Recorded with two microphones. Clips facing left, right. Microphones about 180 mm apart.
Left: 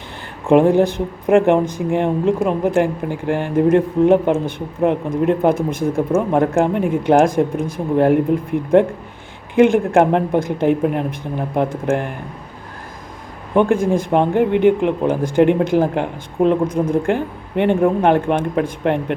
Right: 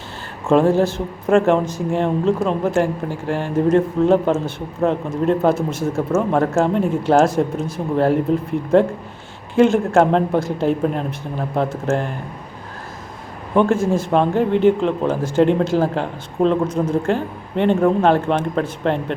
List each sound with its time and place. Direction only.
0.4 s speech: 15° left (ahead or behind)
13.6 s speech: 15° left (ahead or behind)